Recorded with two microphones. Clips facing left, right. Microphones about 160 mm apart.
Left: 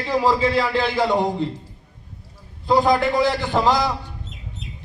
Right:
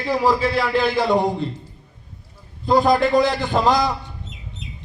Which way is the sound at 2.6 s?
20° right (ahead or behind).